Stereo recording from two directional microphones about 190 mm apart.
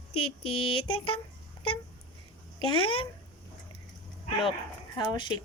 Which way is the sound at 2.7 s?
25° left (ahead or behind).